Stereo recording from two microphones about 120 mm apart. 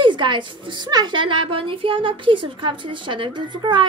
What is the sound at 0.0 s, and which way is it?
A woman's voice, 40° right (ahead or behind).